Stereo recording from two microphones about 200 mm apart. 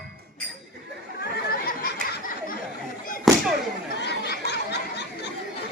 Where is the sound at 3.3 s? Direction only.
Centre (ahead or behind).